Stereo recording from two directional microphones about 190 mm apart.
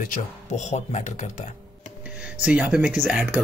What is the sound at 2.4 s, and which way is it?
Speech, 5° right (ahead or behind).